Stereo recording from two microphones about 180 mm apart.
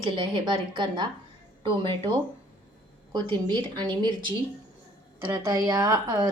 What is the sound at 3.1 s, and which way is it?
A woman's voice, 25° right (ahead or behind).